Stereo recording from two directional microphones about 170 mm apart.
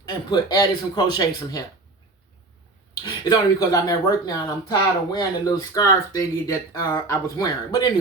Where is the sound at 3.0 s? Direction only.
25° left (ahead or behind).